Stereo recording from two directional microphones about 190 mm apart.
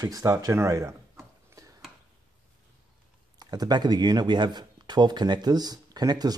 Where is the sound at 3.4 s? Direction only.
20° right (ahead or behind).